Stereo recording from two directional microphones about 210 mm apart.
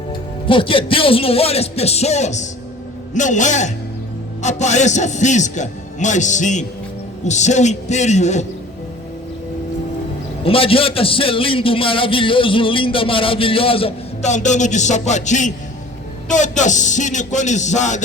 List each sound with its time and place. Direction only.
0.1 s a man's voice: 25° left (ahead or behind)
10.4 s a man's voice: 25° left (ahead or behind)